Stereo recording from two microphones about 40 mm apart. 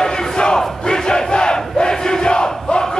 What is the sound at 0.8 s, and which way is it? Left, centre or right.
Crowd, centre.